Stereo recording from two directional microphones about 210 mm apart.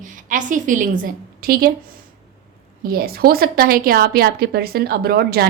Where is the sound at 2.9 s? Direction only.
45° right (ahead or behind).